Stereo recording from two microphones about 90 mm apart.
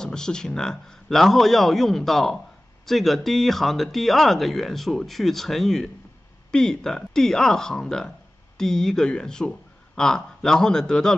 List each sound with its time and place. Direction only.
0.0 s a man's voice: 10° left (ahead or behind)